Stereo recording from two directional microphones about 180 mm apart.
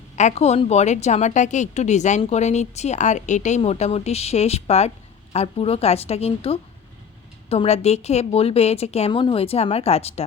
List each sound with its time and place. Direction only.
0.2 s a woman's voice: 40° left (ahead or behind)